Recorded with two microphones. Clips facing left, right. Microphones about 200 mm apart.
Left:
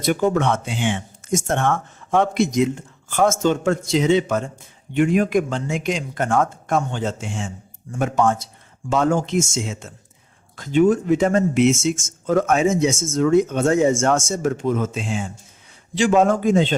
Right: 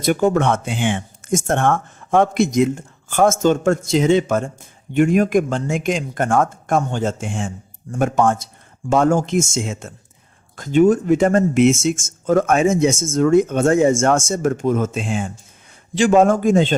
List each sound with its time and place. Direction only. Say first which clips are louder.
0.0 s speech: right 2 dB; 50° right (ahead or behind)